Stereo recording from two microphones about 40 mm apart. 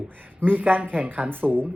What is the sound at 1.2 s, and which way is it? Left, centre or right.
Speech, right.